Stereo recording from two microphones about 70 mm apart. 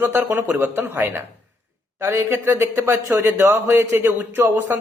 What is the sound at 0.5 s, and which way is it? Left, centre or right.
Speech, right.